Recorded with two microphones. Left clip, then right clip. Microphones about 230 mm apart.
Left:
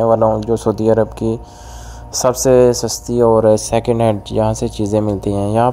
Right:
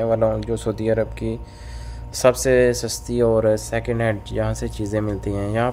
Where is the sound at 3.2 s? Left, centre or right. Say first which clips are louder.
Left 7 dB; centre.